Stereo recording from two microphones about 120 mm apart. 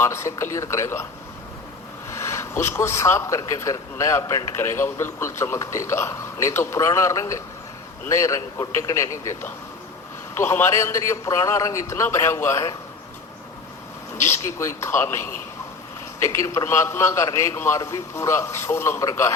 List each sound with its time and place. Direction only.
0.0 s speech: 25° left (ahead or behind)
2.0 s speech: 25° left (ahead or behind)
14.3 s speech: 25° left (ahead or behind)